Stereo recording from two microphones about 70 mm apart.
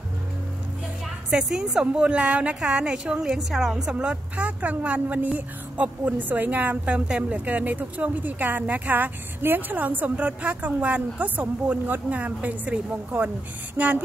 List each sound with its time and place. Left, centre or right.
1.3 s a woman's voice: centre